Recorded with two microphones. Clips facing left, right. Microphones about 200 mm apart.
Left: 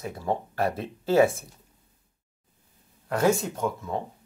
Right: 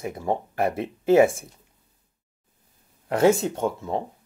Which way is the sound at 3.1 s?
25° right (ahead or behind).